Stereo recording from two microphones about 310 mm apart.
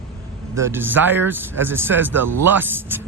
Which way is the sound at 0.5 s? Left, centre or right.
Centre.